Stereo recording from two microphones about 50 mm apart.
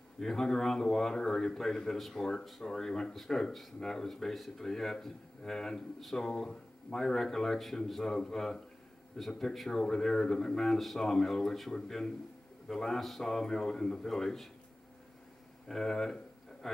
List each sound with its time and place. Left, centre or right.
0.2 s a man's voice: centre
15.7 s a man's voice: centre
16.6 s a sound: centre